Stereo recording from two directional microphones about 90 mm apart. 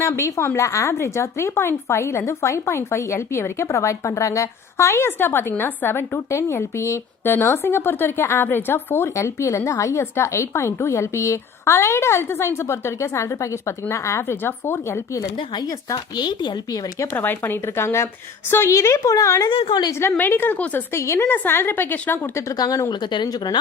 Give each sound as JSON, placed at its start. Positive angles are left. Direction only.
{"t": 0.0, "sound": "a woman's voice", "side_deg": 35}
{"t": 16.1, "sound": "speech", "side_deg": 50}
{"t": 17.1, "sound": "a woman's voice", "side_deg": 25}
{"t": 19.5, "sound": "a woman's voice", "side_deg": 90}
{"t": 19.9, "sound": "a woman's voice", "side_deg": 25}
{"t": 20.9, "sound": "a woman's voice", "side_deg": 30}
{"t": 22.5, "sound": "speech", "side_deg": 45}